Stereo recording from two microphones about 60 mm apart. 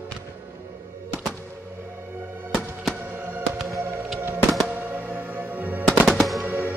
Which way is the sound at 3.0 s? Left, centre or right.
Right.